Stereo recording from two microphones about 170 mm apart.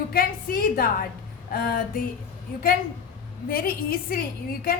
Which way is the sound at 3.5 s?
60° left (ahead or behind).